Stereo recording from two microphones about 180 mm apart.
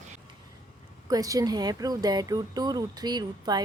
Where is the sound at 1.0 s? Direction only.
20° right (ahead or behind).